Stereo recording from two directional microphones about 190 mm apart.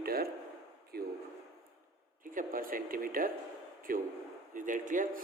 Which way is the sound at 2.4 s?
45° right (ahead or behind).